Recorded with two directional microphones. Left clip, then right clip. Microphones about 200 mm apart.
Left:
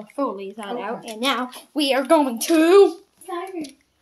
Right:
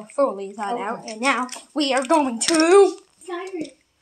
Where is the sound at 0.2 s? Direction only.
Centre (ahead or behind).